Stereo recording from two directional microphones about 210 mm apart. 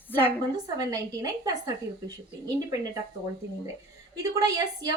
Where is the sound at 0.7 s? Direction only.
15° right (ahead or behind).